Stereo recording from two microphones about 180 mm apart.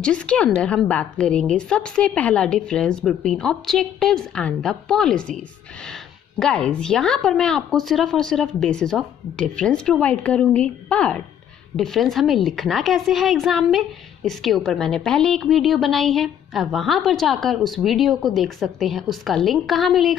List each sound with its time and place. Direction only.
0.0 s a woman's voice: 5° left (ahead or behind)
6.4 s a woman's voice: 5° left (ahead or behind)